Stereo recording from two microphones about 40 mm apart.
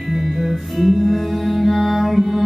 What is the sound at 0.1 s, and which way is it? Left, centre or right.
Music, centre.